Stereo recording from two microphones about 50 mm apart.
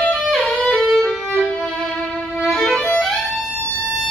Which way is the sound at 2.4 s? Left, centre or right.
Centre.